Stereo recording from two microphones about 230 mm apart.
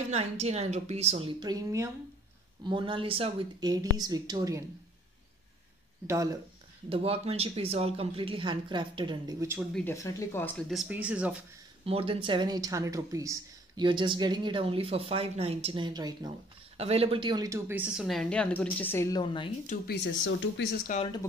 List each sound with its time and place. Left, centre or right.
0.1 s speech: right
6.0 s speech: centre
6.9 s speech: right
9.8 s speech: centre
10.7 s speech: centre
11.8 s speech: right; by 19.8 s left
19.9 s speech: left
20.9 s speech: left